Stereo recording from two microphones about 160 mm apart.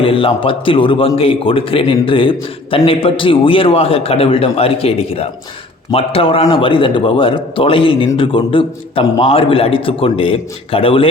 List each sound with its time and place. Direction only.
0.0 s a man's voice: 35° left (ahead or behind)